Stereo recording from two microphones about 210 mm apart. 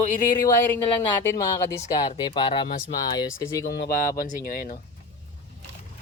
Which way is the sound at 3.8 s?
45° left (ahead or behind).